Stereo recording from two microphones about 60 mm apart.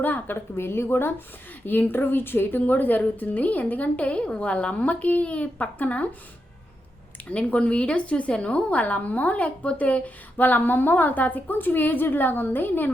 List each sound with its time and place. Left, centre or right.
0.0 s a woman's voice: left
7.3 s a woman's voice: left